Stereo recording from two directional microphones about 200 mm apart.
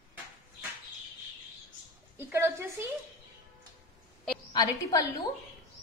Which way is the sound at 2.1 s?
10° right (ahead or behind).